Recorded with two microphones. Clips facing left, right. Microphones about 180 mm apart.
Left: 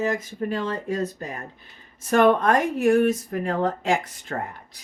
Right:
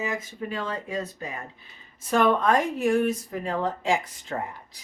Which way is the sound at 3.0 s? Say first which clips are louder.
Left 4 dB; 55° left (ahead or behind).